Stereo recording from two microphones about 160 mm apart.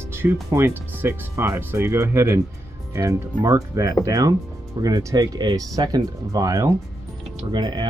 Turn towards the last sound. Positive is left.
turn(degrees=-30)  # may be behind; listen again after turning